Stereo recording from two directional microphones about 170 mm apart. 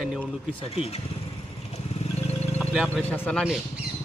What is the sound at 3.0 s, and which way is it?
Speech, 10° left (ahead or behind).